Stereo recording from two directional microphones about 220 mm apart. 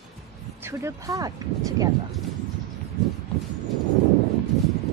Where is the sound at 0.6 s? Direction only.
10° right (ahead or behind).